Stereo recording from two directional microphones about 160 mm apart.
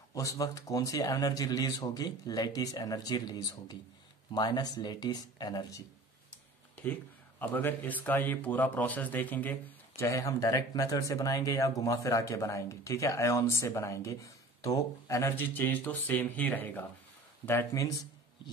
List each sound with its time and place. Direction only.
0.1 s speech: 20° left (ahead or behind)
6.7 s a man's voice: 10° left (ahead or behind)